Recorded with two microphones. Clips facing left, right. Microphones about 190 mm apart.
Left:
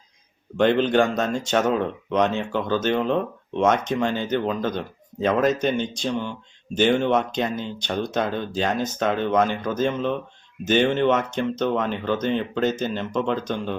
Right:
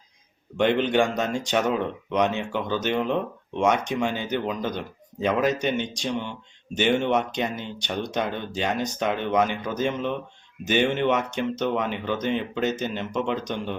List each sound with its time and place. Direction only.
0.5 s speech: 15° right (ahead or behind)